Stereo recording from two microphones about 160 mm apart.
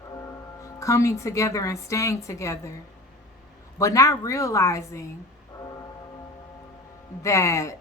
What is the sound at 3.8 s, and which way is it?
A woman's voice, 20° left (ahead or behind).